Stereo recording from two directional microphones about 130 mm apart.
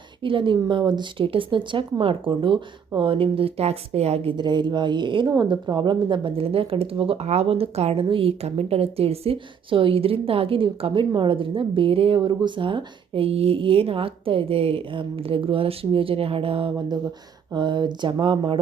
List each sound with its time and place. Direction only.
0.2 s speech: 40° right (ahead or behind)
4.4 s a woman's voice: 35° right (ahead or behind)